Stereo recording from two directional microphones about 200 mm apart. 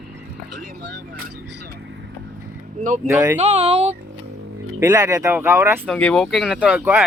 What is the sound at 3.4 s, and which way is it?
Speech, 30° right (ahead or behind).